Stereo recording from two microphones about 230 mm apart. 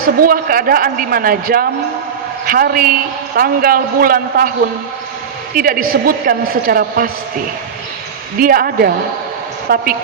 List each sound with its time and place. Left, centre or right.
0.0 s a woman's voice: right
5.5 s a woman's voice: right
8.4 s a woman's voice: right